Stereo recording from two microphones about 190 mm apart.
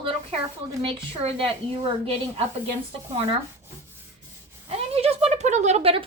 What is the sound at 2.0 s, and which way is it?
Speech, 30° right (ahead or behind).